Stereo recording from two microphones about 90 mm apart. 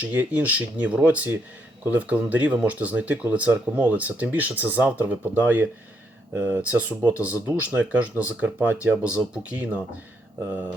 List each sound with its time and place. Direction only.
0.0 s speech: 20° right (ahead or behind)